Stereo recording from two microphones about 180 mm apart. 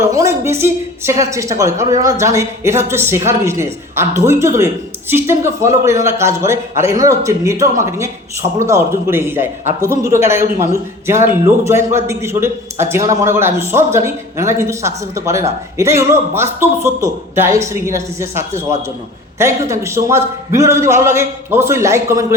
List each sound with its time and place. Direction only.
0.1 s a woman's voice: 15° right (ahead or behind)